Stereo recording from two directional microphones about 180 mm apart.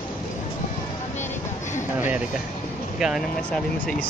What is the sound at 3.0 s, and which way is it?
Speech, centre (ahead or behind).